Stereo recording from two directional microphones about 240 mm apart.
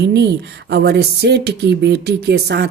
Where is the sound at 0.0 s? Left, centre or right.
Right.